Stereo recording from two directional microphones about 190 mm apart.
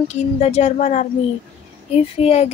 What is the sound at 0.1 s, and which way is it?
Child singing, 35° left (ahead or behind).